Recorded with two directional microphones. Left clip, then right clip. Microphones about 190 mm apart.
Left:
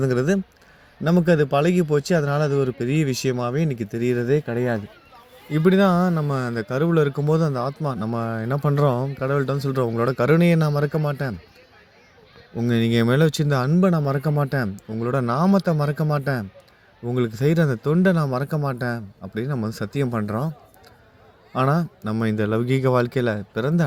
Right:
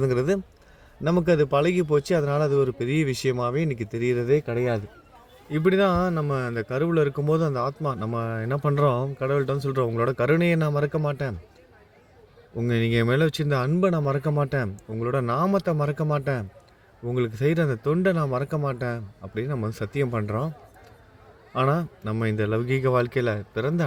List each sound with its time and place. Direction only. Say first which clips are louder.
0.0 s a man's voice: left 2 dB; 30° left (ahead or behind)
12.5 s a man's voice: left 3 dB; 35° left (ahead or behind)
21.5 s a man's voice: left 2 dB; 40° left (ahead or behind)